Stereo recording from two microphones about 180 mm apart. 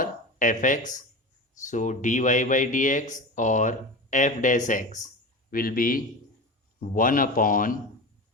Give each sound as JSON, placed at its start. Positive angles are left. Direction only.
{"t": 0.0, "sound": "speech", "side_deg": 45}